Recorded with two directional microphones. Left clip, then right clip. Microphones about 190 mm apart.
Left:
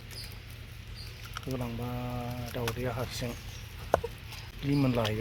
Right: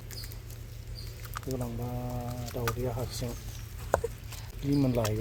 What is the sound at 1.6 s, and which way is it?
Speech, 10° left (ahead or behind).